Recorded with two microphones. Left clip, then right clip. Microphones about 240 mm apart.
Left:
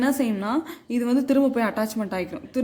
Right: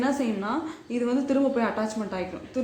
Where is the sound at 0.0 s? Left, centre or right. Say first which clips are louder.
Left 3 dB; left.